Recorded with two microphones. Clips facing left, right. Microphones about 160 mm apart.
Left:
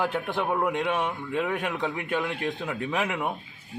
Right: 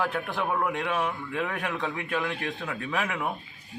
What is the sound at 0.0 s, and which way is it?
A man's voice, 20° left (ahead or behind).